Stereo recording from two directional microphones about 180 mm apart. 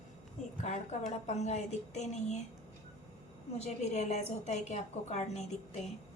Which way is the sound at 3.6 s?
40° left (ahead or behind).